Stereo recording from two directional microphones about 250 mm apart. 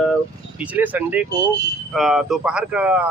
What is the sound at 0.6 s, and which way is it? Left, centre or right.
Speech, centre.